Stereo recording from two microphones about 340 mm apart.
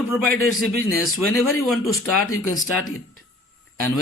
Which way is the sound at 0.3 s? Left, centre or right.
Left.